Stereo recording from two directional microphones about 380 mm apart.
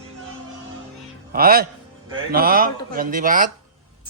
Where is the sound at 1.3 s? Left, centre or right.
Right.